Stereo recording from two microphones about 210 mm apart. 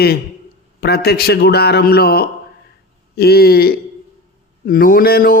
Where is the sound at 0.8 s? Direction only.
50° left (ahead or behind).